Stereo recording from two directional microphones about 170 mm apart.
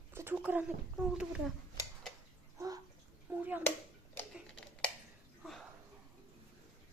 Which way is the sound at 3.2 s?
10° right (ahead or behind).